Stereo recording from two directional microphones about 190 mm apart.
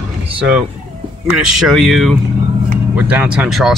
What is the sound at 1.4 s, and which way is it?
Speech, 5° right (ahead or behind).